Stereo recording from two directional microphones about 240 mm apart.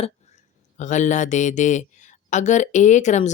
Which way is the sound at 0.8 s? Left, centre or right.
Left.